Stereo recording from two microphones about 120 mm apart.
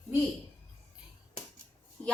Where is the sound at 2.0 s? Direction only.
10° left (ahead or behind).